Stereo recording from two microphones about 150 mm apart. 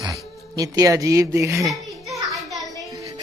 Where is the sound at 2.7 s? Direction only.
25° right (ahead or behind).